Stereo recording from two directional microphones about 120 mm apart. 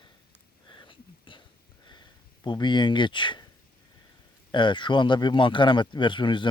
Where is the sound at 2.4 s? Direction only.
40° left (ahead or behind).